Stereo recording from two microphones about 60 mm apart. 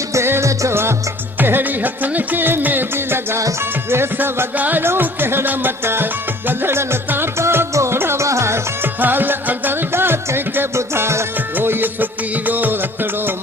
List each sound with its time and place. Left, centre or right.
0.1 s music: right
1.4 s music: right
4.5 s music: right
8.2 s music: right
9.0 s music: right